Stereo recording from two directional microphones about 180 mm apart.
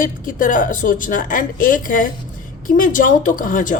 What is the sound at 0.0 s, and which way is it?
A woman's voice, 45° left (ahead or behind).